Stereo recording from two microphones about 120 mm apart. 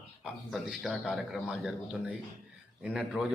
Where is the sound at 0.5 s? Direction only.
Centre (ahead or behind).